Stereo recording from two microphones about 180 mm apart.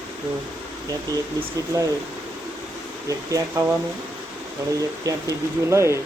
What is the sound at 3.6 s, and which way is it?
Speech, 20° right (ahead or behind).